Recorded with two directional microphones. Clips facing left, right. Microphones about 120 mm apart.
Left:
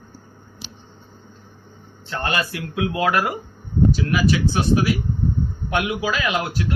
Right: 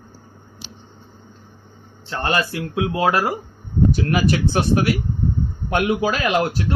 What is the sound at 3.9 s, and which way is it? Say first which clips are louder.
Speech: right 1 dB; 50° right (ahead or behind).